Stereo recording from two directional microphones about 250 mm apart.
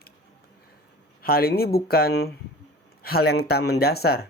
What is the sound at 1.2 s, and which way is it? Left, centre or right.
Speech, left.